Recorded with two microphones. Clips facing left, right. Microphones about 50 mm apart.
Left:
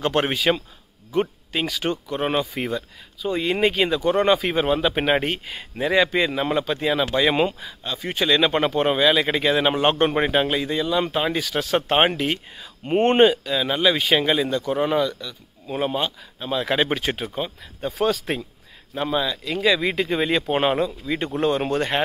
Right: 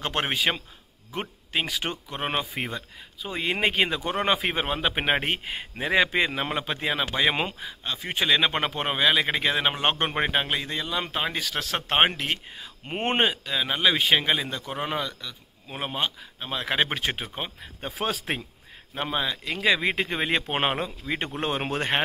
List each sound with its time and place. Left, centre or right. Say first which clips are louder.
0.0 s a man's voice: left 5 dB; centre
17.4 s speech: left 6 dB; right
18.9 s speech: left 4 dB; centre